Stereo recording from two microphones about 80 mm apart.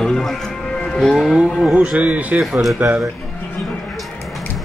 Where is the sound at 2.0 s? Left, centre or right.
Centre.